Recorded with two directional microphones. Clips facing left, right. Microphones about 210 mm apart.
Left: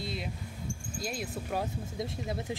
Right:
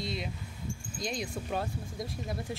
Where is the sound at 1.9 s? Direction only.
25° left (ahead or behind).